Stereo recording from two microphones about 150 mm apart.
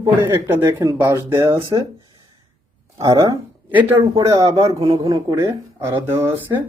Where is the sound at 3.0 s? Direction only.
25° right (ahead or behind).